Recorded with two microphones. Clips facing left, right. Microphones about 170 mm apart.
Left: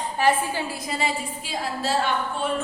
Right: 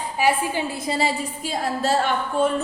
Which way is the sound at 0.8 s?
35° right (ahead or behind).